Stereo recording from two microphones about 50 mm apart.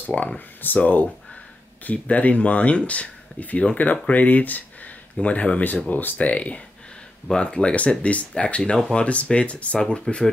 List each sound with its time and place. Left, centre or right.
0.0 s speech: left
5.9 s speech: left; by 10.3 s centre